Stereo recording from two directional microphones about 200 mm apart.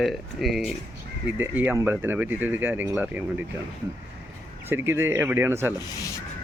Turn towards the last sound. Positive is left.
turn(degrees=-10)  # may be behind; listen again after turning